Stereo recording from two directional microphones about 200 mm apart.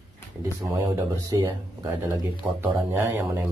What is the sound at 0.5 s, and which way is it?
Speech, 15° right (ahead or behind).